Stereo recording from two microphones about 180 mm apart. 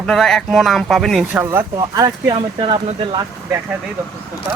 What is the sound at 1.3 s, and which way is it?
Speech, 10° right (ahead or behind).